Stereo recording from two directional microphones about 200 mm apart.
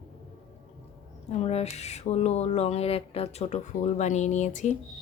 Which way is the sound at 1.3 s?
30° left (ahead or behind).